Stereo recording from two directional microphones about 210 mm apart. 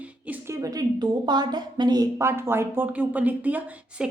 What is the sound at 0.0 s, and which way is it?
A woman's voice, 10° right (ahead or behind).